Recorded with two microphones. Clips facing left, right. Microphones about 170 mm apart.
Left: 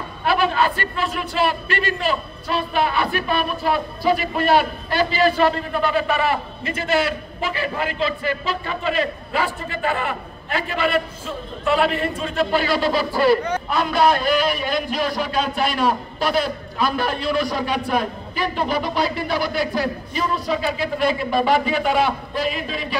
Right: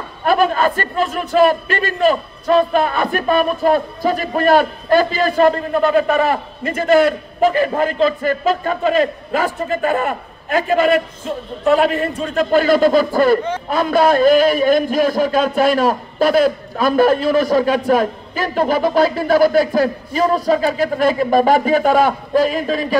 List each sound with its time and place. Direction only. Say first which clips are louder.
0.2 s a man's voice: right 4 dB; 45° right (ahead or behind)